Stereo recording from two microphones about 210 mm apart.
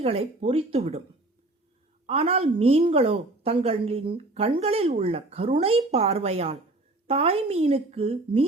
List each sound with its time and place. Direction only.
0.0 s a woman's voice: 30° right (ahead or behind)
2.0 s a woman's voice: 30° right (ahead or behind)